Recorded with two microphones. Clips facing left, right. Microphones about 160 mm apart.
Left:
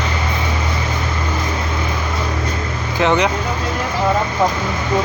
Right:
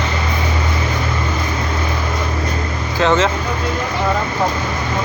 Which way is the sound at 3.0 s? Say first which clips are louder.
Right 1 dB; 15° left (ahead or behind).